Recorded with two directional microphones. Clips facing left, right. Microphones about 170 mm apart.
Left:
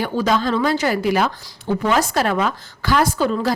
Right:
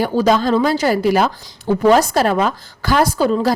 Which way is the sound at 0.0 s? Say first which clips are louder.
Right 4 dB; 40° right (ahead or behind).